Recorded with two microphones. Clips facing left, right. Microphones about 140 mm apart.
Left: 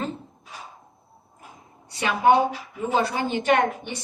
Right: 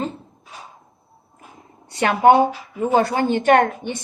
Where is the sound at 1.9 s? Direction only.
60° right (ahead or behind).